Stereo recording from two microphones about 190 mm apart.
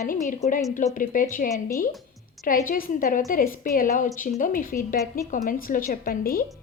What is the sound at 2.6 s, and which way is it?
A woman's voice, 45° left (ahead or behind).